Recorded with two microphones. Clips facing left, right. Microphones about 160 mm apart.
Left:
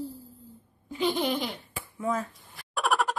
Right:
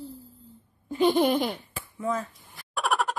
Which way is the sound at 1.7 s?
5° left (ahead or behind).